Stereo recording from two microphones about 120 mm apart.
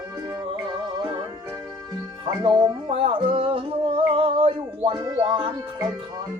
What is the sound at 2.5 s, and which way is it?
Music, 30° right (ahead or behind).